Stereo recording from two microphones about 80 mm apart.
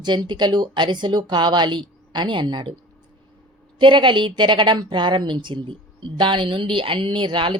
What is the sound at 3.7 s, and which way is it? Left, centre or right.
A woman's voice, right.